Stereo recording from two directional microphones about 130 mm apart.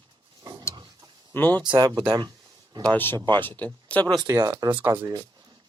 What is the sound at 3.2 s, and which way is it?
Speech, 35° right (ahead or behind).